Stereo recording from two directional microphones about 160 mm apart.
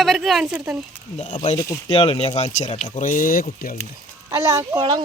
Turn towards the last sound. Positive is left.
turn(degrees=-20)  # may be behind; listen again after turning